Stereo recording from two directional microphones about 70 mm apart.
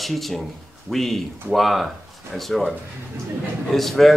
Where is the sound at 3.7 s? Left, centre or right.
Centre.